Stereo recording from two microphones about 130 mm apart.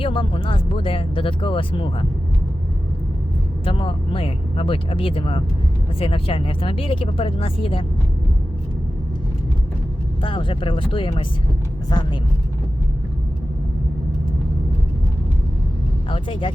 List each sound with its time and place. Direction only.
0.0 s speech: 40° left (ahead or behind)
3.7 s speech: 45° left (ahead or behind)
10.2 s speech: 40° left (ahead or behind)
16.0 s speech: 40° left (ahead or behind)